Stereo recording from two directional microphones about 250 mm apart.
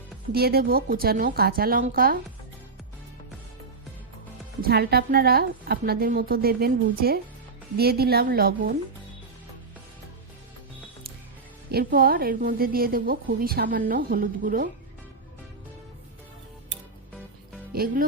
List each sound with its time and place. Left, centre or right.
0.3 s a woman's voice: right
4.6 s a woman's voice: right
11.7 s a woman's voice: right
17.7 s speech: right